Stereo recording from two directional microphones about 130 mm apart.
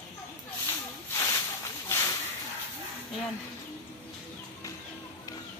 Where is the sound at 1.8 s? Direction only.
25° left (ahead or behind).